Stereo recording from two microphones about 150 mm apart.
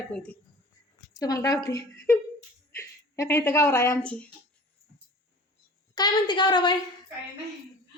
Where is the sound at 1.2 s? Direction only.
25° left (ahead or behind).